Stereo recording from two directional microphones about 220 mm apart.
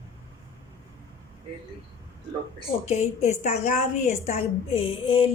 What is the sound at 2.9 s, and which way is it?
A woman's voice, 30° left (ahead or behind).